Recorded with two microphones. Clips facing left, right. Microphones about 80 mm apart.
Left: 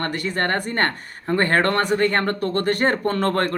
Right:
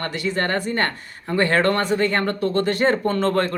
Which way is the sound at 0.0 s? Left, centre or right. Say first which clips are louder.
Even; left.